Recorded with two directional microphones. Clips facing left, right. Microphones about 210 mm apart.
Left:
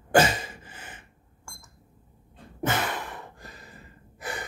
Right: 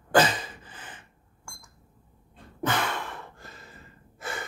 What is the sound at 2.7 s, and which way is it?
Gasp, 20° left (ahead or behind).